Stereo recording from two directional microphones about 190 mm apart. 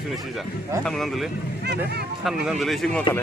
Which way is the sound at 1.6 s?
60° right (ahead or behind).